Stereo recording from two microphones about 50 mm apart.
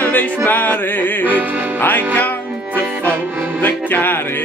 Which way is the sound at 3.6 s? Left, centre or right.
Left.